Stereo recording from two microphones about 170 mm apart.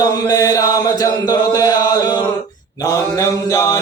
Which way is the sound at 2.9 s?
20° left (ahead or behind).